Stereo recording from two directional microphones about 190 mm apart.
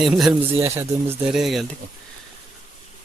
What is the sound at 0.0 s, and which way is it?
Speech, centre (ahead or behind).